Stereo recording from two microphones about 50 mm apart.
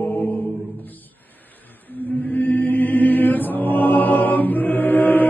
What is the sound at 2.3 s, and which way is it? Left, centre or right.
Chant, left.